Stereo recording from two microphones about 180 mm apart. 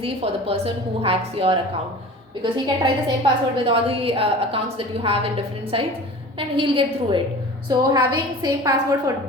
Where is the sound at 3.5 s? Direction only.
30° right (ahead or behind).